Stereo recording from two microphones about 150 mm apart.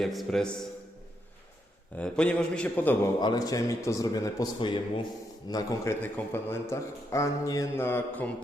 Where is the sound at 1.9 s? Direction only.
10° left (ahead or behind).